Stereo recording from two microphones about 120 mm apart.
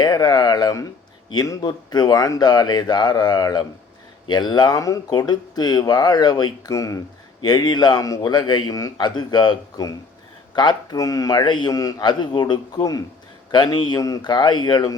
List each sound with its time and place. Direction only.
0.0 s speech: 35° left (ahead or behind)